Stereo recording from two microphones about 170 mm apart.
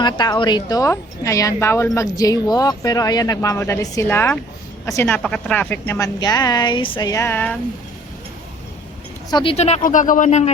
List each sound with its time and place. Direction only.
0.0 s speech: 25° left (ahead or behind)
7.1 s speech: 15° left (ahead or behind)
9.3 s speech: 30° left (ahead or behind)